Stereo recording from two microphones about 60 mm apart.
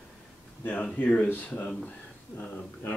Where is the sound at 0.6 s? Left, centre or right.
Left.